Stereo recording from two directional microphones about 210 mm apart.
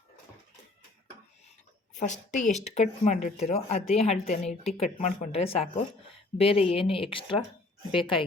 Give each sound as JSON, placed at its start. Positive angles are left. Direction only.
{"t": 2.0, "sound": "speech", "side_deg": 35}